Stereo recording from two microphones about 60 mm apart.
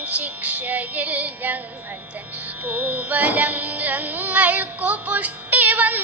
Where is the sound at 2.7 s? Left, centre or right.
Right.